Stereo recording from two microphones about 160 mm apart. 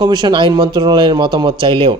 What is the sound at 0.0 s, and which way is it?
A man's voice, 25° right (ahead or behind).